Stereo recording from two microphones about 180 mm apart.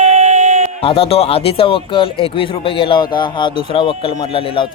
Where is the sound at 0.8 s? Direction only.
30° left (ahead or behind).